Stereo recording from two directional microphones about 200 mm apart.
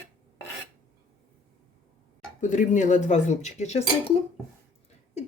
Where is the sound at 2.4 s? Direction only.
40° left (ahead or behind).